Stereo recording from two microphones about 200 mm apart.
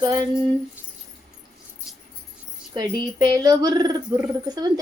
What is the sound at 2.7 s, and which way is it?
A child's voice, 20° right (ahead or behind).